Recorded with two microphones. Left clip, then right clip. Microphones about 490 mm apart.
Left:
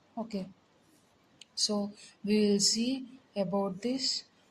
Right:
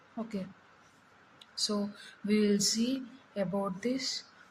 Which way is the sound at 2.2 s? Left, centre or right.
Left.